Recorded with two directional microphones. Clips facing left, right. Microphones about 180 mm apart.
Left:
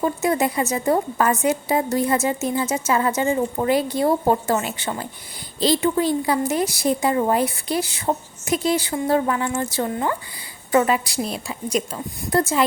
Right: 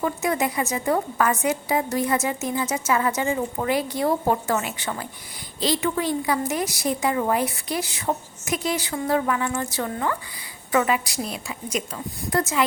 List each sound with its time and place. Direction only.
0.0 s a woman's voice: 30° left (ahead or behind)